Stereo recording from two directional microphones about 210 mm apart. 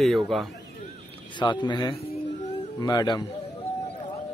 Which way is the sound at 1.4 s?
20° left (ahead or behind).